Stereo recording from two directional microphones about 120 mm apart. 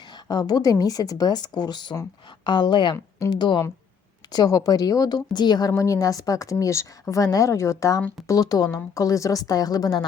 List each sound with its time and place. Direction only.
0.3 s a woman's voice: 35° left (ahead or behind)